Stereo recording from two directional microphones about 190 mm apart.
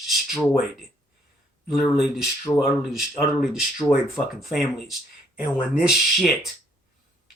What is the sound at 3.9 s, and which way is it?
Speech, 10° left (ahead or behind).